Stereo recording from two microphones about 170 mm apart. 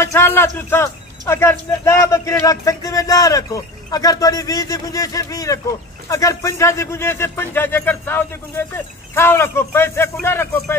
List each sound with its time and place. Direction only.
0.0 s speech: 15° left (ahead or behind)